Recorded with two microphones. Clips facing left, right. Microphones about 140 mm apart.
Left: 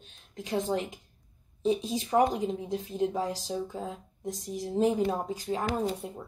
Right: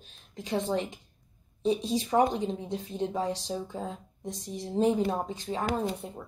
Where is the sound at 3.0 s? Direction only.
30° right (ahead or behind).